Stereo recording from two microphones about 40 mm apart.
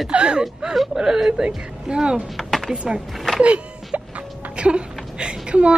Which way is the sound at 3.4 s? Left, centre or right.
Right.